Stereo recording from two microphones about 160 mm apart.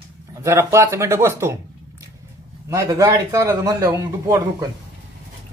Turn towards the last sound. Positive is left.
turn(degrees=-20)  # may be behind; listen again after turning